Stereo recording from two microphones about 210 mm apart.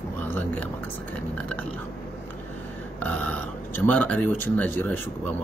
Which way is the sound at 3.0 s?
10° left (ahead or behind).